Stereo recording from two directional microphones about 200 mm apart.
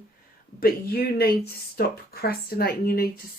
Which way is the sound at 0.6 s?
50° left (ahead or behind).